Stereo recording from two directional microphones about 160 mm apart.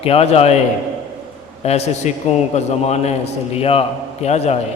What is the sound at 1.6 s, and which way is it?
A man's voice, 40° left (ahead or behind).